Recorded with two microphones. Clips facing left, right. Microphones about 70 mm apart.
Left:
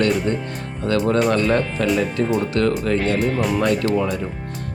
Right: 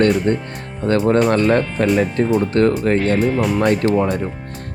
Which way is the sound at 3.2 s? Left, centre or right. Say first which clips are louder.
Right 3 dB; centre.